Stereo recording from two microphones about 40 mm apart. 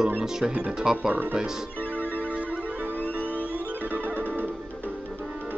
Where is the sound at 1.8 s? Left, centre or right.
Left.